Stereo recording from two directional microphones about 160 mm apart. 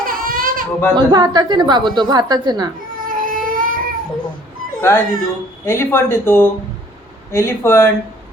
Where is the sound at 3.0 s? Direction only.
60° right (ahead or behind).